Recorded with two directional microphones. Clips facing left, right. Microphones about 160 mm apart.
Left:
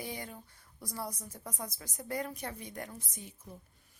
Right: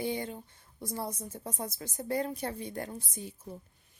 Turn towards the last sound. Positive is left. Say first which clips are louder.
# right 5 dB
turn(degrees=-30)  # may be behind; listen again after turning